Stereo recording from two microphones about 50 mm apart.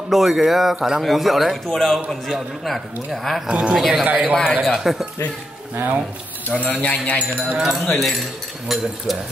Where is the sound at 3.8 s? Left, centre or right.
Centre.